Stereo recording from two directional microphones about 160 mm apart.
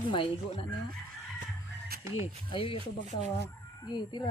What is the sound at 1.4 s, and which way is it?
Music, 75° right (ahead or behind).